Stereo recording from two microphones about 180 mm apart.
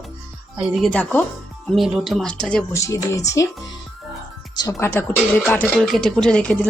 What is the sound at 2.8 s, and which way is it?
Speech, 15° left (ahead or behind).